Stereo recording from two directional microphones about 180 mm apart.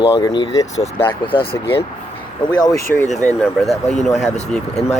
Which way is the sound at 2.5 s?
20° left (ahead or behind).